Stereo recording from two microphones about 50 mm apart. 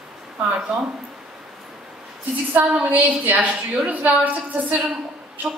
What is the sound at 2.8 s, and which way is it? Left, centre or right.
A woman's voice, right.